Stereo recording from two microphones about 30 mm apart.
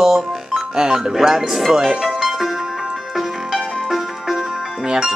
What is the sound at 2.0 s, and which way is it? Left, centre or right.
Music, centre.